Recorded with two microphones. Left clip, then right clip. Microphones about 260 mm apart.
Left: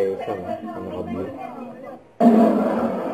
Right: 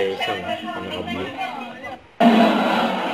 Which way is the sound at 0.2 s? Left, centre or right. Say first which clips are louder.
Right 3 dB; centre.